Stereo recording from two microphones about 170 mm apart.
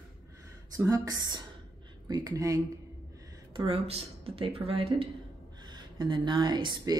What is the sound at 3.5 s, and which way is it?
Speech, 30° right (ahead or behind).